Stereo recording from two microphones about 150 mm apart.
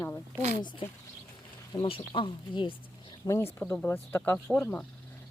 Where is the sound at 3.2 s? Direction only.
20° left (ahead or behind).